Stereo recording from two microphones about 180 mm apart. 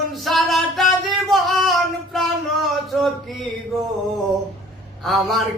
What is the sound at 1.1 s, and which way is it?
Singing, centre (ahead or behind).